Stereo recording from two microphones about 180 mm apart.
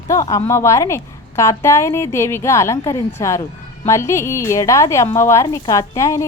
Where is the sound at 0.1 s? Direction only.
20° left (ahead or behind).